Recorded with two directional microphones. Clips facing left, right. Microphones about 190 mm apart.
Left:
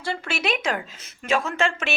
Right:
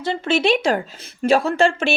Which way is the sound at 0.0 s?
25° right (ahead or behind).